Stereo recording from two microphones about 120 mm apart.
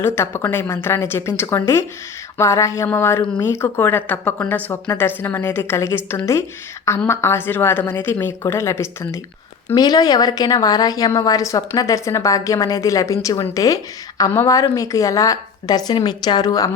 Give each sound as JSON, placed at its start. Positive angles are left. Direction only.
{"t": 0.0, "sound": "a woman's voice", "side_deg": 20}
{"t": 9.7, "sound": "a woman's voice", "side_deg": 30}